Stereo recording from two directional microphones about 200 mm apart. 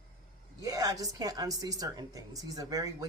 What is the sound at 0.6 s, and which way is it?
A woman's voice, 15° right (ahead or behind).